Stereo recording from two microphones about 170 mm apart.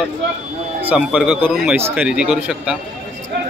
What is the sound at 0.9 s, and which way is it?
Speech, 5° right (ahead or behind).